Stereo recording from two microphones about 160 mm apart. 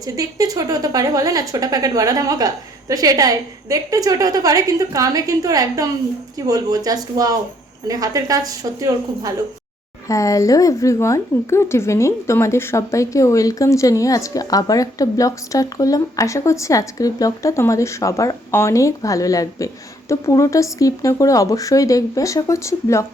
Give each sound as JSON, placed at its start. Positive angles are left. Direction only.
{"t": 0.0, "sound": "a woman's voice", "side_deg": -20}
{"t": 10.1, "sound": "a woman's voice", "side_deg": 20}